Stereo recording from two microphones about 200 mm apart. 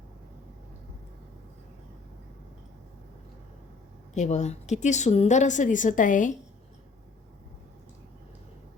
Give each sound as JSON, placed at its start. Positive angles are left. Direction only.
{"t": 4.1, "sound": "a woman's voice", "side_deg": 35}